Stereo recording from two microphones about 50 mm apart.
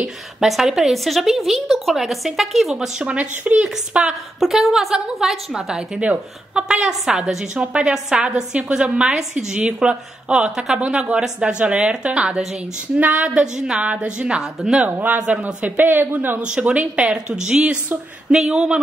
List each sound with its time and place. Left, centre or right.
0.5 s a woman's voice: centre
3.0 s speech: right
4.4 s a woman's voice: centre
6.5 s speech: right
7.2 s speech: centre
7.6 s speech: right
13.3 s speech: centre
14.9 s speech: right
16.3 s speech: right